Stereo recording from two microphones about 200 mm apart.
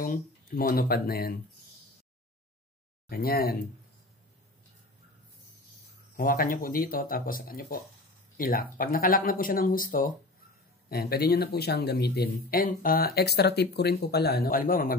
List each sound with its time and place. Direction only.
0.0 s speech: 45° left (ahead or behind)
3.1 s speech: 50° left (ahead or behind)
6.1 s speech: 45° left (ahead or behind)